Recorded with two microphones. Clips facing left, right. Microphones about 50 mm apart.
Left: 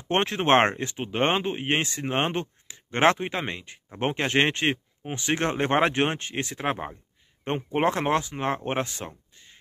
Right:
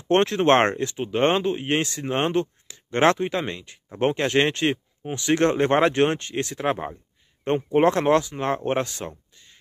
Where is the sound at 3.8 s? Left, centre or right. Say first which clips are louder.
Right 4 dB; centre.